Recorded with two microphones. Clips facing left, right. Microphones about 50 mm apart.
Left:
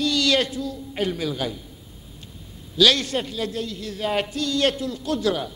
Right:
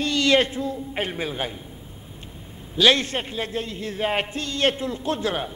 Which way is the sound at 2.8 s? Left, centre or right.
Right.